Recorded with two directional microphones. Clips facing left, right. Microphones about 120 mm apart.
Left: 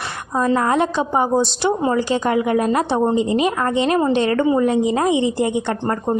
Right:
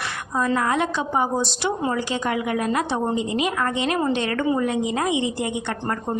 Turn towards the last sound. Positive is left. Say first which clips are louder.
# left 6 dB
turn(degrees=30)  # may be behind; listen again after turning